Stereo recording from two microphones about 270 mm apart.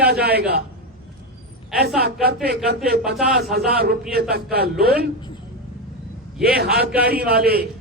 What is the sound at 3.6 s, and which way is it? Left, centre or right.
Speech, right.